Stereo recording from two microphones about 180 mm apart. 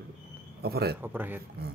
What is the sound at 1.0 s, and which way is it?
Speech, 10° right (ahead or behind).